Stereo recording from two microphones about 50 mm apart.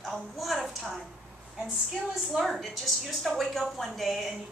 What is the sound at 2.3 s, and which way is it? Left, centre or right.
A woman's voice, centre.